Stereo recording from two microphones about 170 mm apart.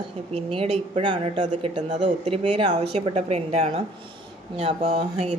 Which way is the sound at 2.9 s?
40° right (ahead or behind).